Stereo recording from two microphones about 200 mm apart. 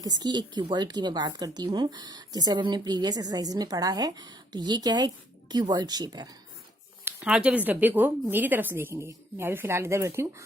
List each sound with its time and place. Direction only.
0.0 s speech: 20° right (ahead or behind)
7.0 s speech: 5° right (ahead or behind)